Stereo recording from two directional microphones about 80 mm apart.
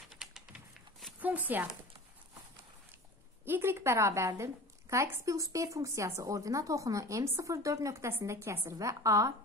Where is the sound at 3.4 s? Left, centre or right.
Right.